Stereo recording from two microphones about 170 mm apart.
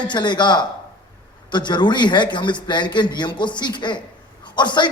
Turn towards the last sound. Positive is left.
turn(degrees=25)  # may be behind; listen again after turning